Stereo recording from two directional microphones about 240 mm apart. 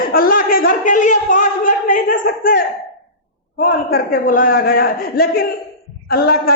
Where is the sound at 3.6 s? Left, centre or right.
Left.